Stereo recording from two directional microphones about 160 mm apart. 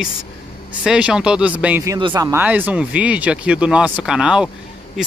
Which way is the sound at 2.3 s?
10° right (ahead or behind).